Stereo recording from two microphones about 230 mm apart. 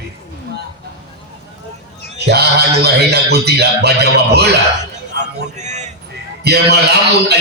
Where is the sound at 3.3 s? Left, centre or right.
Right.